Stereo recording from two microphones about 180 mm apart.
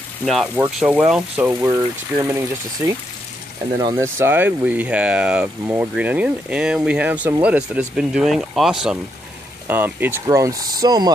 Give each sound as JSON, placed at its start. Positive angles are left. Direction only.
{"t": 0.2, "sound": "speech", "side_deg": 0}
{"t": 1.5, "sound": "speech", "side_deg": -20}
{"t": 3.8, "sound": "speech", "side_deg": -15}